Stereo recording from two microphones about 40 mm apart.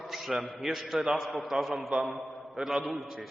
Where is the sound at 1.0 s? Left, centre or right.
Centre.